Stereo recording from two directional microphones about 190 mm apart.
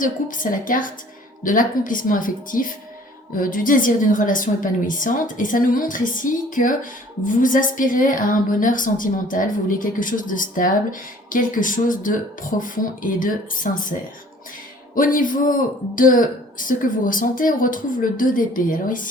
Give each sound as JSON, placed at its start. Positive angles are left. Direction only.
{"t": 0.0, "sound": "speech", "side_deg": 45}
{"t": 14.9, "sound": "speech", "side_deg": 45}